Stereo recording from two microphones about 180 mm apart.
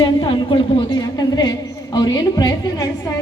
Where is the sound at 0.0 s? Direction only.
25° left (ahead or behind).